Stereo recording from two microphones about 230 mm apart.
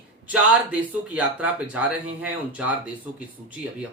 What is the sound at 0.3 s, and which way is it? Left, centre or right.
Speech, centre.